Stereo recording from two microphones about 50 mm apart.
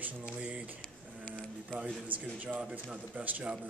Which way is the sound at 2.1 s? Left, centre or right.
Right.